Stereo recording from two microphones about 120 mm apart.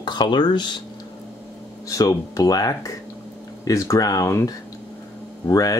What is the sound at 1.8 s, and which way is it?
Speech, 30° left (ahead or behind).